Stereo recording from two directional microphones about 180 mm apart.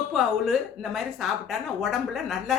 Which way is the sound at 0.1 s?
Centre (ahead or behind).